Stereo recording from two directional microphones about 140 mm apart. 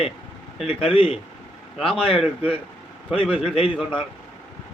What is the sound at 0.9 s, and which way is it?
Speech, 40° left (ahead or behind).